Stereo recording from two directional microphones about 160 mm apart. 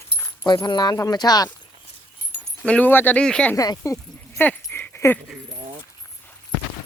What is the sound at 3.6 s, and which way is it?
Speech, 20° left (ahead or behind).